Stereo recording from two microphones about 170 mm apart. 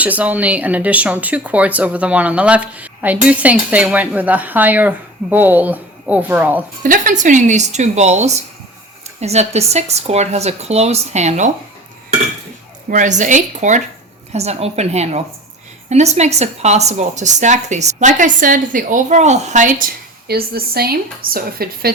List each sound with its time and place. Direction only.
0.0 s speech: 10° right (ahead or behind)
6.8 s a woman's voice: 50° right (ahead or behind)
12.9 s a woman's voice: 45° right (ahead or behind)
20.2 s a woman's voice: 65° right (ahead or behind)